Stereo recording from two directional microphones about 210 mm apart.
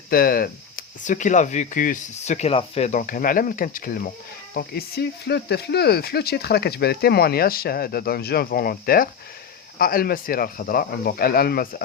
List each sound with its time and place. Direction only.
0.1 s speech: 45° left (ahead or behind)